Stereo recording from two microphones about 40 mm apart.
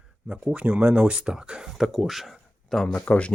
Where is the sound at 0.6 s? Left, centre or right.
Right.